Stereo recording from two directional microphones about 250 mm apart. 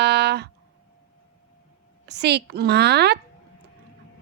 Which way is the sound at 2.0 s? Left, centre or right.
Right.